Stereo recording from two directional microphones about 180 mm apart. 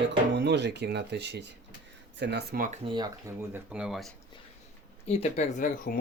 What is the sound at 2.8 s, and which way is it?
Speech, 25° right (ahead or behind).